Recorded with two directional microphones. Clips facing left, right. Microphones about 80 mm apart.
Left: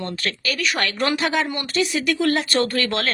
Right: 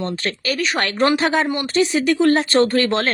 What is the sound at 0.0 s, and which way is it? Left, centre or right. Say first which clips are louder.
Speech: right 3 dB; right.